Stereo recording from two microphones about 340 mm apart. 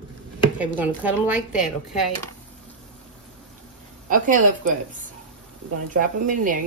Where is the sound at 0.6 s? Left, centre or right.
Centre.